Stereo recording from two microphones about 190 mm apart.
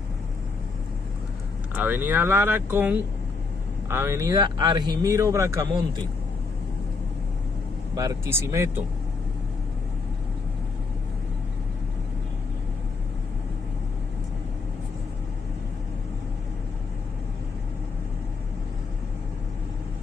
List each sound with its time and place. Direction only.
1.8 s speech: 10° right (ahead or behind)
7.9 s speech: 20° right (ahead or behind)